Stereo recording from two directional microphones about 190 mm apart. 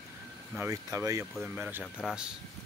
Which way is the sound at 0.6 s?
15° right (ahead or behind).